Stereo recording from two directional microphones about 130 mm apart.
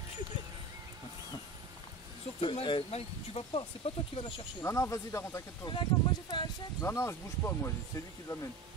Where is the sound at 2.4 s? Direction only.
40° left (ahead or behind).